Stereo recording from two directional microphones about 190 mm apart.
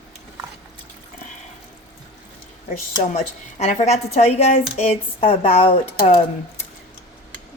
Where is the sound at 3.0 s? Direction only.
40° left (ahead or behind).